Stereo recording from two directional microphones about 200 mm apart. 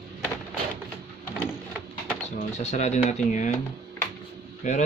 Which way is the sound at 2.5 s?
35° left (ahead or behind).